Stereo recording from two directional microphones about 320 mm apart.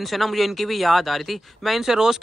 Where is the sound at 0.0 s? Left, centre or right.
Centre.